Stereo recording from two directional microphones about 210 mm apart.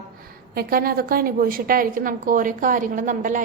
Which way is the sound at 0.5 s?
45° right (ahead or behind).